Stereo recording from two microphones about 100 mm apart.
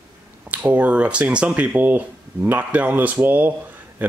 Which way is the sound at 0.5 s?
15° right (ahead or behind).